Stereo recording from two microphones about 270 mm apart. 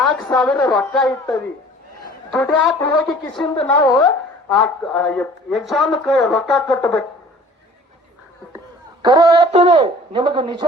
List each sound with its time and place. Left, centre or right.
0.0 s speech: centre
3.4 s speech: left
4.4 s speech: centre
9.0 s speech: centre